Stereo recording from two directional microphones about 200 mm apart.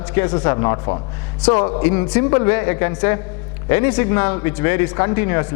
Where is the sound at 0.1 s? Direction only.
10° left (ahead or behind).